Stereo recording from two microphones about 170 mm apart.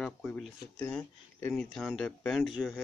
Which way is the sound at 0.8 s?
5° left (ahead or behind).